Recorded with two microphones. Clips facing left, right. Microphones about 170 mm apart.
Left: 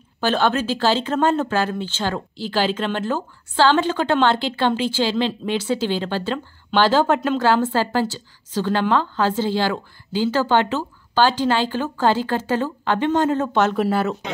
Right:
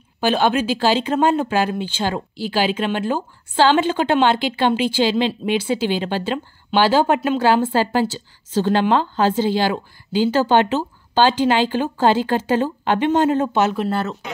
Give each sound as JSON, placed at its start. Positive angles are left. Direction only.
{"t": 0.2, "sound": "a woman's voice", "side_deg": -15}
{"t": 13.7, "sound": "speech", "side_deg": 5}